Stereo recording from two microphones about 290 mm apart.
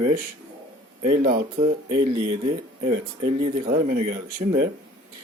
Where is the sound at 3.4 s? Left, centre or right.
Right.